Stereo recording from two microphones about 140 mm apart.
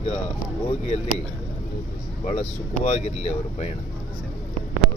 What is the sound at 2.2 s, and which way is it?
Speech, 50° left (ahead or behind).